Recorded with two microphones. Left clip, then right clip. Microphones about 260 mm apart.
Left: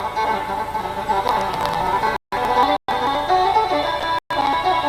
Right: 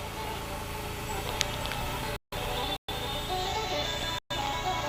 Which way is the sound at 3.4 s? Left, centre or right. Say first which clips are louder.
Left 14 dB; left.